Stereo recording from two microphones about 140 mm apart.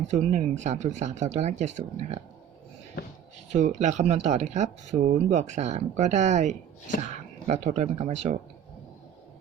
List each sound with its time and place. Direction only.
0.1 s speech: 55° right (ahead or behind)
3.5 s speech: 60° right (ahead or behind)